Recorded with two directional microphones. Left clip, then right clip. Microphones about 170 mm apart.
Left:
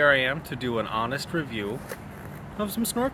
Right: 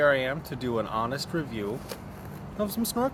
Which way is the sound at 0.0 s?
15° left (ahead or behind).